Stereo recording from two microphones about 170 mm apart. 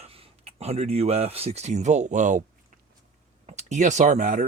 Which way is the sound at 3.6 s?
45° right (ahead or behind).